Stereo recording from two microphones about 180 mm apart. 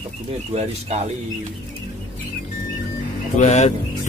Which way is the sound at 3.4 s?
40° left (ahead or behind).